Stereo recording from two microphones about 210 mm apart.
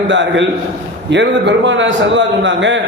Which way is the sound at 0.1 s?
60° right (ahead or behind).